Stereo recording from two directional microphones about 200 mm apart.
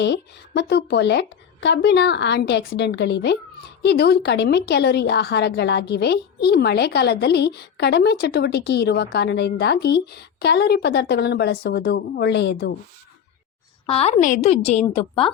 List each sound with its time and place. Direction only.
0.0 s a woman's voice: 60° left (ahead or behind)
13.8 s a woman's voice: 30° left (ahead or behind)